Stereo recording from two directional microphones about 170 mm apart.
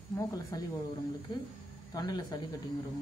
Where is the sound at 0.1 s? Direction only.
20° left (ahead or behind).